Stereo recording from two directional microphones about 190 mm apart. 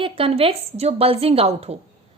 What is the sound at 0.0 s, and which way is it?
A woman's voice, 30° right (ahead or behind).